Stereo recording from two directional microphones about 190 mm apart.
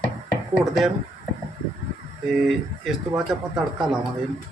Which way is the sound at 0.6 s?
15° right (ahead or behind).